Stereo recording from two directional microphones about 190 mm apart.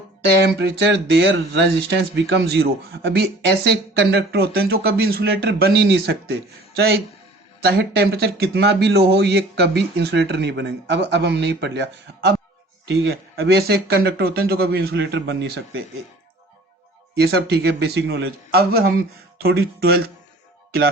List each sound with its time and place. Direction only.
0.4 s speech: 60° right (ahead or behind)
17.2 s speech: 60° right (ahead or behind)